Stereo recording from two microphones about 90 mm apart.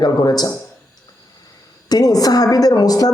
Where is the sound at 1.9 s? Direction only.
45° left (ahead or behind).